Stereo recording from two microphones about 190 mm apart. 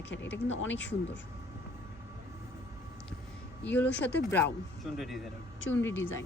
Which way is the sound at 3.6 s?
10° left (ahead or behind).